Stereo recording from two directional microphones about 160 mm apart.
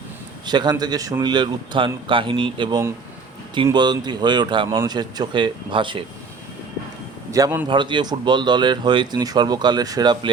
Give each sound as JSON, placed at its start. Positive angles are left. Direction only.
{"t": 0.4, "sound": "speech", "side_deg": -25}
{"t": 7.3, "sound": "a man's voice", "side_deg": -20}